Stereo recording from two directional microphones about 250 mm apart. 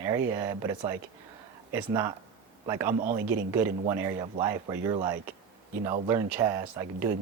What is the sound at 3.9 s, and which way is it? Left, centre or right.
Speech, centre.